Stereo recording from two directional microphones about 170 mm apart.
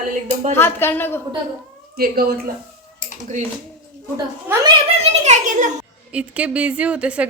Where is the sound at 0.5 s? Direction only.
15° left (ahead or behind).